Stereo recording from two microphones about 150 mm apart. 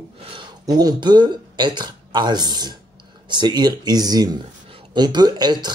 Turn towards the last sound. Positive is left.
turn(degrees=-25)  # may be behind; listen again after turning